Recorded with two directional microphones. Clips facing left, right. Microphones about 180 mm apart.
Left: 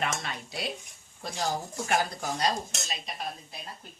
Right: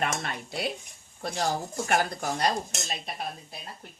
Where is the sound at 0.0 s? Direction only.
55° right (ahead or behind).